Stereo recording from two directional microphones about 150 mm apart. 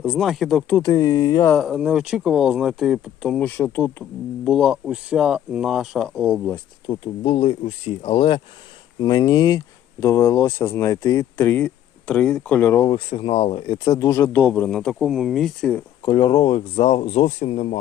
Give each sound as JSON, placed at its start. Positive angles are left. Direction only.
{"t": 0.0, "sound": "speech", "side_deg": 0}
{"t": 0.7, "sound": "speech", "side_deg": 20}
{"t": 1.6, "sound": "speech", "side_deg": -5}
{"t": 4.4, "sound": "speech", "side_deg": 0}
{"t": 6.8, "sound": "speech", "side_deg": 30}
{"t": 9.0, "sound": "speech", "side_deg": 25}
{"t": 13.1, "sound": "speech", "side_deg": 40}
{"t": 13.7, "sound": "speech", "side_deg": 20}
{"t": 16.0, "sound": "speech", "side_deg": 30}